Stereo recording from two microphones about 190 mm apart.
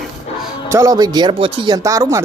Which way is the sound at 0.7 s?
15° right (ahead or behind).